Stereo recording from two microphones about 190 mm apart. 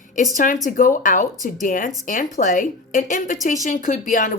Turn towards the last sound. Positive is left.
turn(degrees=45)  # may be behind; listen again after turning